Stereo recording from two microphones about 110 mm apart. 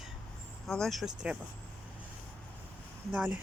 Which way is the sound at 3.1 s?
15° right (ahead or behind).